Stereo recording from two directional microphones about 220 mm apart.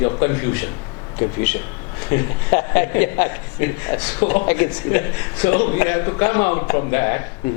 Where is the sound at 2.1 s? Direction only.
15° left (ahead or behind).